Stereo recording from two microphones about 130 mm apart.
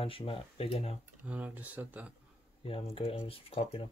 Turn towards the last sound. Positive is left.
turn(degrees=50)  # may be behind; listen again after turning